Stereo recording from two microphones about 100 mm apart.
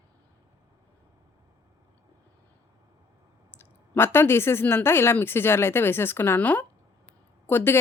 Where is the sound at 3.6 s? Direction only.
25° left (ahead or behind).